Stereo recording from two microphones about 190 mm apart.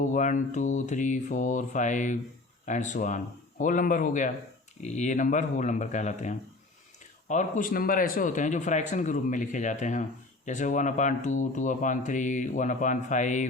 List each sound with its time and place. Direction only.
0.0 s speech: 40° left (ahead or behind)